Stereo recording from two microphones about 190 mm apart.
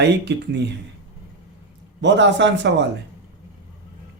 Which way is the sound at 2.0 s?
70° right (ahead or behind).